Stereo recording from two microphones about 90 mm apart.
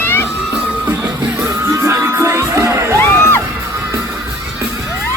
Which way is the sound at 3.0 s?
25° left (ahead or behind).